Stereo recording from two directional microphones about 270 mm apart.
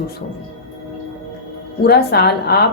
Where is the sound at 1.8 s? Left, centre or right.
Left.